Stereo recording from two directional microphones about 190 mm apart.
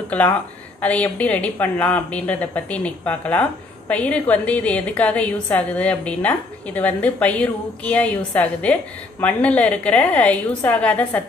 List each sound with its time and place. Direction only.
0.7 s a woman's voice: 5° left (ahead or behind)